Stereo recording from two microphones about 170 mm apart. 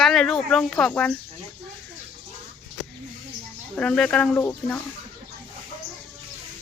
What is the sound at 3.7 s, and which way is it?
Speech, 5° left (ahead or behind).